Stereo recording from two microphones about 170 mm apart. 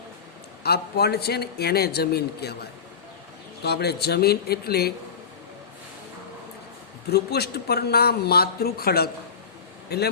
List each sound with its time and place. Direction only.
0.6 s a man's voice: 70° left (ahead or behind)
3.6 s a man's voice: 75° left (ahead or behind)
7.1 s a man's voice: 70° left (ahead or behind)